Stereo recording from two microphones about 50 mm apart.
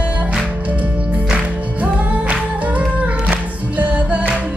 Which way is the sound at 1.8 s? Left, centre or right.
Right.